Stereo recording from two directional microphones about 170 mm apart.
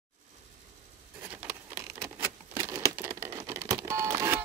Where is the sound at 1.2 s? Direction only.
10° right (ahead or behind).